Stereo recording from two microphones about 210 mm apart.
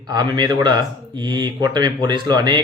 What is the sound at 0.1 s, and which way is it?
Speech, 20° right (ahead or behind).